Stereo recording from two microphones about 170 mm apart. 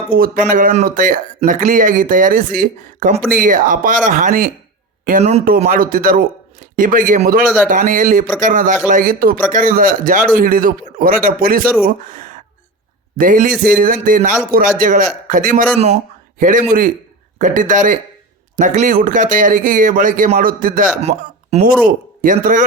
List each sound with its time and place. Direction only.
0.2 s speech: 55° right (ahead or behind)
21.0 s speech: 40° right (ahead or behind)
21.8 s a man's voice: 50° right (ahead or behind)